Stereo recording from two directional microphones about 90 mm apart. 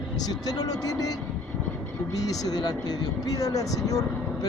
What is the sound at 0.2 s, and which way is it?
Speech, 45° left (ahead or behind).